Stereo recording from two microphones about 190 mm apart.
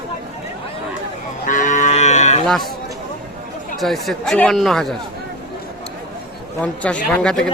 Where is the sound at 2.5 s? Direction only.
Centre (ahead or behind).